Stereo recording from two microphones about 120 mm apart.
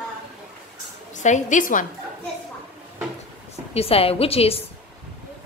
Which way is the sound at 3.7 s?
55° left (ahead or behind).